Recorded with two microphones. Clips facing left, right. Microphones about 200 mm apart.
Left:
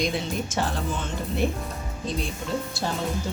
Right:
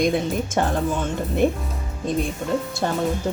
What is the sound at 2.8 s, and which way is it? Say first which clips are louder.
Speech: right 5 dB; 55° right (ahead or behind).